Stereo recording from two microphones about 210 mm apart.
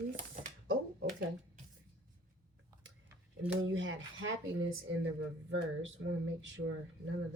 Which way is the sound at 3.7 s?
65° right (ahead or behind).